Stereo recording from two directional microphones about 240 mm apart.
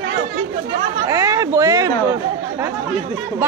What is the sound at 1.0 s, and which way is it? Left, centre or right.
Chatter, centre.